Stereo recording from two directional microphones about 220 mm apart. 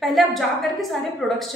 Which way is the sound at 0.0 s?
Centre (ahead or behind).